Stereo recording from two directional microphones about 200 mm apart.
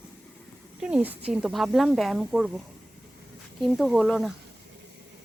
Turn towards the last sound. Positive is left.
turn(degrees=0)  # may be behind; listen again after turning